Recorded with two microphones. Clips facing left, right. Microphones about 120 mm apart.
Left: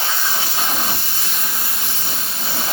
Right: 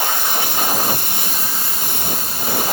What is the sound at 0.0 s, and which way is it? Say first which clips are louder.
Hiss: right 3 dB; 55° right (ahead or behind).